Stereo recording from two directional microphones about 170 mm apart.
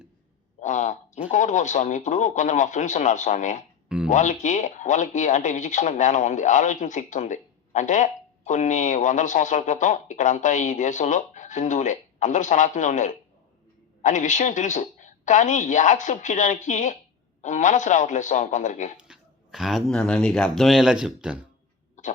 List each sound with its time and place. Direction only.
0.6 s speech: 45° left (ahead or behind)
3.8 s speech: 5° right (ahead or behind)
4.1 s speech: 45° left (ahead or behind)
18.9 s speech: 5° right (ahead or behind)